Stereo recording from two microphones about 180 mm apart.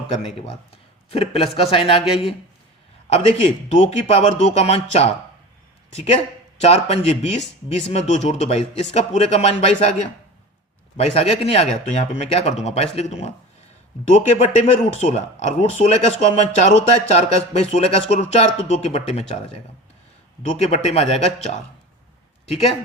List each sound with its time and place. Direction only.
0.1 s speech: 35° left (ahead or behind)
1.7 s a sound: 30° left (ahead or behind)
3.1 s speech: 40° left (ahead or behind)
6.6 s speech: 35° left (ahead or behind)
20.4 s speech: 40° left (ahead or behind)